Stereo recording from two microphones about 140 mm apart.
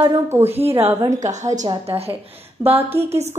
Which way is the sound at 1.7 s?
40° right (ahead or behind).